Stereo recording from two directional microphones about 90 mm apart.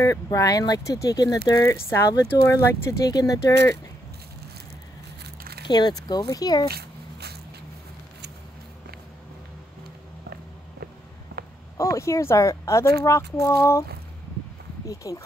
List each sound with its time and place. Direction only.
0.0 s speech: 35° left (ahead or behind)
3.1 s speech: 40° left (ahead or behind)
5.7 s speech: 50° left (ahead or behind)
11.7 s speech: 35° left (ahead or behind)
15.0 s speech: 40° left (ahead or behind)